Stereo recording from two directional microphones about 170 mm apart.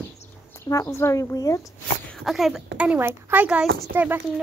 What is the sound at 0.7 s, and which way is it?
Speech, 15° left (ahead or behind).